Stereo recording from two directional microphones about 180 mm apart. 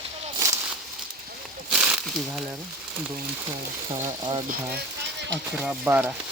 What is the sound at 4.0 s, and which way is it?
Speech, 15° right (ahead or behind).